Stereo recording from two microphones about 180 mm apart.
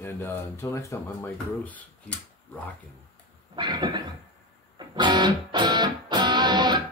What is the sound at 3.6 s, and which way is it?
Cough, 25° right (ahead or behind).